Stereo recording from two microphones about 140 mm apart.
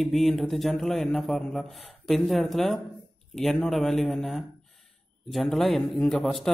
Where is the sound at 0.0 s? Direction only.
Centre (ahead or behind).